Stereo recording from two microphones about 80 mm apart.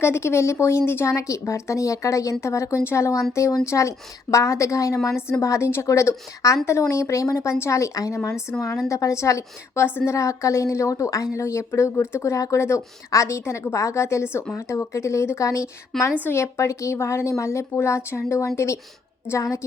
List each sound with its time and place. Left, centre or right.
0.0 s speech: left